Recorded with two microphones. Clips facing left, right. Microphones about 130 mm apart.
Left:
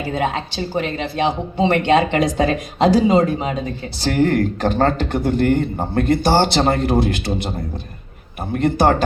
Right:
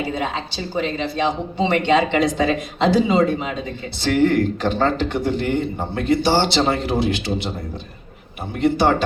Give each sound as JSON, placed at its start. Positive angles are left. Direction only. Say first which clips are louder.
{"t": 0.1, "sound": "a man's voice", "louder": "left 3 dB", "side_deg": 50}
{"t": 8.5, "sound": "a man's voice", "louder": "left 1 dB", "side_deg": 45}